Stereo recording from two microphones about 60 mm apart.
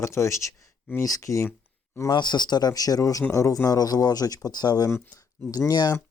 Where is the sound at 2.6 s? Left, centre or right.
Left.